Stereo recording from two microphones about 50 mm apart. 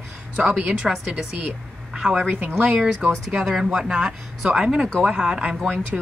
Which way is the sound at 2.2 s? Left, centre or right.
Right.